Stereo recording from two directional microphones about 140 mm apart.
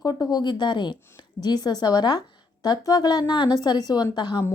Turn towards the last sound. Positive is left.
turn(degrees=30)  # may be behind; listen again after turning